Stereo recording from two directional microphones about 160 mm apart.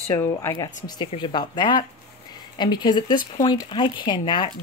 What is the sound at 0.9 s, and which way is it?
A woman's voice, 30° left (ahead or behind).